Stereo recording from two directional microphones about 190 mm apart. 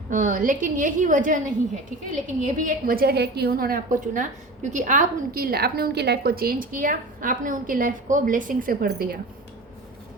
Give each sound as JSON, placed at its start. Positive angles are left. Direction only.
{"t": 0.1, "sound": "a woman's voice", "side_deg": -45}
{"t": 2.4, "sound": "a woman's voice", "side_deg": -45}